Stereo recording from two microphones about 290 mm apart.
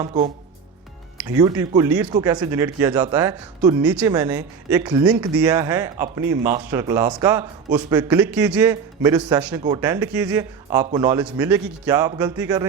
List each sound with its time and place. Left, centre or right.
0.0 s speech: right
1.4 s speech: centre